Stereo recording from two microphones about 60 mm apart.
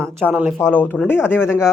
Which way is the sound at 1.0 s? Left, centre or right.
Left.